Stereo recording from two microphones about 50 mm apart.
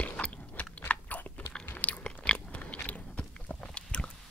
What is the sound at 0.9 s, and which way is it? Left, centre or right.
Typing, left.